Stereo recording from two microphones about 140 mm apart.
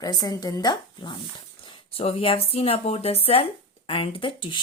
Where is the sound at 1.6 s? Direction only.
45° left (ahead or behind).